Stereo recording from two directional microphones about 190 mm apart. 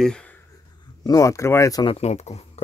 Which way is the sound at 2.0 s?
35° left (ahead or behind).